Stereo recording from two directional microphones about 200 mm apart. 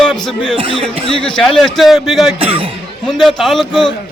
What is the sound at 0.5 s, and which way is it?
Speech, 25° right (ahead or behind).